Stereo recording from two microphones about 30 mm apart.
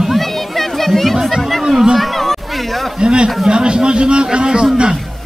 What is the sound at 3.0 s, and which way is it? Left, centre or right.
A man's voice, right.